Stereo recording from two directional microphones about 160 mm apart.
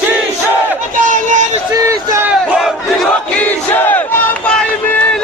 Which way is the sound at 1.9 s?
15° right (ahead or behind).